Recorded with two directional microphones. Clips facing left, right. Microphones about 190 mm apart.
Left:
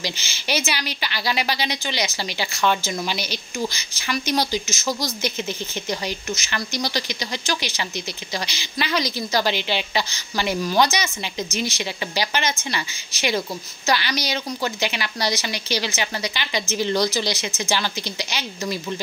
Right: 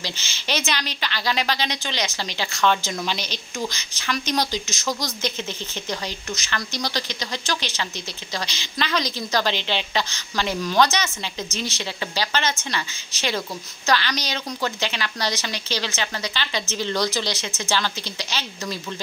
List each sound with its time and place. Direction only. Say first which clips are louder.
0.0 s speech: left 3 dB; 10° left (ahead or behind)